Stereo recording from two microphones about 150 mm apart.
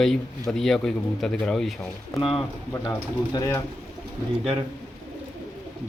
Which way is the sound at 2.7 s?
25° left (ahead or behind).